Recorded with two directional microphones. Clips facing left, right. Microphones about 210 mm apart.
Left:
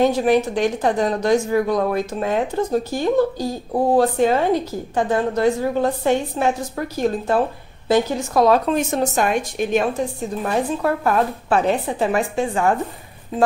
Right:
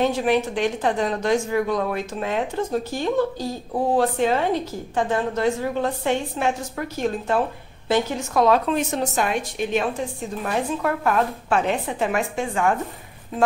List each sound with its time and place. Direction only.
0.0 s a woman's voice: 40° left (ahead or behind)